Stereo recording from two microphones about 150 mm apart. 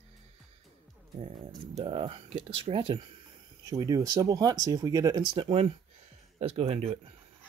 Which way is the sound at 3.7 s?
25° right (ahead or behind).